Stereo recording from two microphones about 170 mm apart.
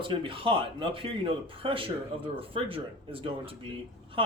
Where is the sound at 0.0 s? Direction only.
30° right (ahead or behind).